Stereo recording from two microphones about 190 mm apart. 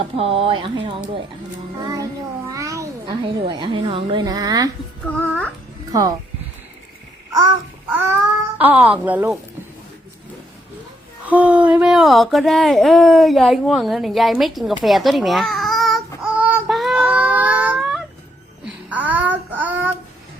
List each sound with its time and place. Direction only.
0.2 s a woman's voice: 30° right (ahead or behind)
2.5 s a sound: 15° right (ahead or behind)
3.2 s a woman's voice: 25° right (ahead or behind)
5.0 s speech: 10° left (ahead or behind)
5.9 s a woman's voice: 20° right (ahead or behind)
7.9 s speech: 10° right (ahead or behind)
11.3 s speech: 10° right (ahead or behind)
14.8 s babbling: centre (ahead or behind)
18.6 s child singing: 10° right (ahead or behind)